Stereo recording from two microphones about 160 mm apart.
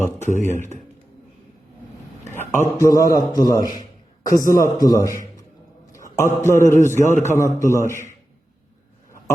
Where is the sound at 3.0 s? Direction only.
20° left (ahead or behind).